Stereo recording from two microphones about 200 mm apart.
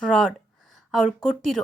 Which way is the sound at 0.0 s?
5° left (ahead or behind).